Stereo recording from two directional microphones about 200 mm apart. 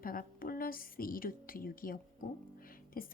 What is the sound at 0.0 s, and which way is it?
A woman's voice, 45° left (ahead or behind).